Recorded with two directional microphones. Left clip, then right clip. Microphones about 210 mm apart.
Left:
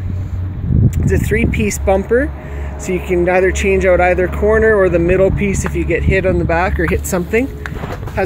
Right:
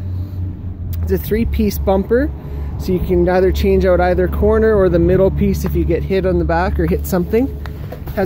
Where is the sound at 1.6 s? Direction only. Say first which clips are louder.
Even; 15° right (ahead or behind).